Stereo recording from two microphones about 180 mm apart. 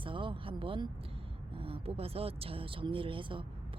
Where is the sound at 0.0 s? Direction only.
30° right (ahead or behind).